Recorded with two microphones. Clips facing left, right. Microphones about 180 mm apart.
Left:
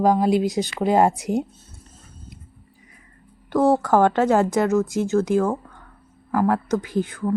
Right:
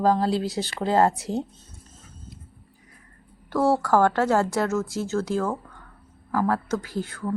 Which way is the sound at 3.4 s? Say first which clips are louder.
Left 3 dB; 20° left (ahead or behind).